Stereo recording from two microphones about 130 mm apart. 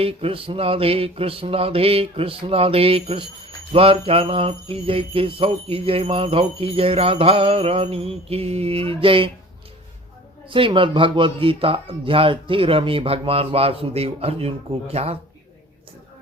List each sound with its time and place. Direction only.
0.0 s mantra: 45° right (ahead or behind)
10.5 s mantra: 40° right (ahead or behind)